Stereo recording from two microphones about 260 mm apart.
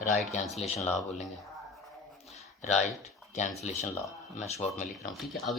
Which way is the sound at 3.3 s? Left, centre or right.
Left.